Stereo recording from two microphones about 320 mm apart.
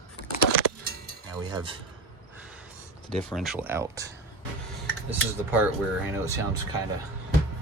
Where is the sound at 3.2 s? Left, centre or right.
Centre.